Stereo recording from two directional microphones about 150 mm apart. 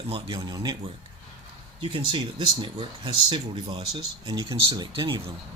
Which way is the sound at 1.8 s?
35° right (ahead or behind).